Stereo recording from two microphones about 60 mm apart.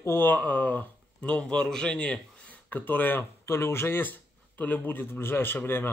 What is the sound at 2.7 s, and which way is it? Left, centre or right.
Speech, left.